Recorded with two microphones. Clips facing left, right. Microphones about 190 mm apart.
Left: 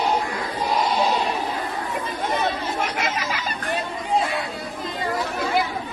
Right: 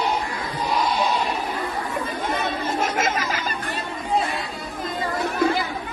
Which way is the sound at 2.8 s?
45° right (ahead or behind).